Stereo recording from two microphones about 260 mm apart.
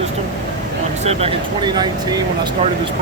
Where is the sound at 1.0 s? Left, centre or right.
Centre.